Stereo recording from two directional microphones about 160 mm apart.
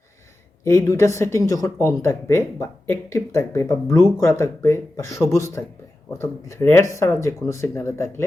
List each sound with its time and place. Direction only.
0.6 s speech: 20° left (ahead or behind)